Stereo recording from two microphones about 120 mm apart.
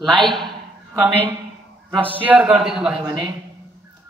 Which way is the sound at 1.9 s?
50° right (ahead or behind).